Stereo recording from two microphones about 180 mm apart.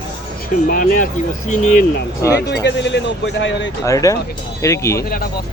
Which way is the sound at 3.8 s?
20° left (ahead or behind).